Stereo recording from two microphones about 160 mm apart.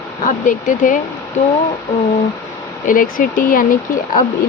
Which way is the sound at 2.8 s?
60° left (ahead or behind).